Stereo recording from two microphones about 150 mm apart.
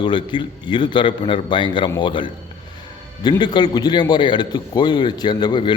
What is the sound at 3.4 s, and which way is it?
A man's voice, 30° left (ahead or behind).